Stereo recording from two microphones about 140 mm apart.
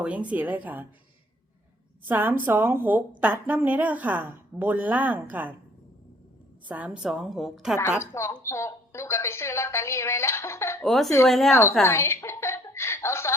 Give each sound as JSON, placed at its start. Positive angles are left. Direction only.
{"t": 0.0, "sound": "a woman's voice", "side_deg": -10}
{"t": 2.0, "sound": "a woman's voice", "side_deg": -15}
{"t": 6.7, "sound": "a woman's voice", "side_deg": -10}
{"t": 8.1, "sound": "a woman's voice", "side_deg": 20}
{"t": 10.8, "sound": "a woman's voice", "side_deg": 0}
{"t": 11.8, "sound": "chuckle", "side_deg": 20}